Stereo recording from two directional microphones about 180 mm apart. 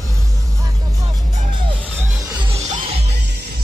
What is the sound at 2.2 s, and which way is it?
Music, 20° right (ahead or behind).